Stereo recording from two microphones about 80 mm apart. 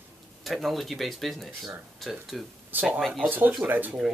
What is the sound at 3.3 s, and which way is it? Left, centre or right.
Speech, right.